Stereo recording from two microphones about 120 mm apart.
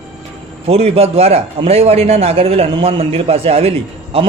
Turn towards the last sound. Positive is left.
turn(degrees=-55)  # may be behind; listen again after turning